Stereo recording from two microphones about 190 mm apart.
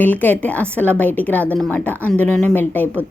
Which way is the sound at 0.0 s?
10° left (ahead or behind).